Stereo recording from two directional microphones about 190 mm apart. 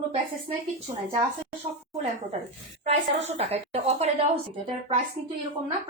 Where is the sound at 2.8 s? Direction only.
35° right (ahead or behind).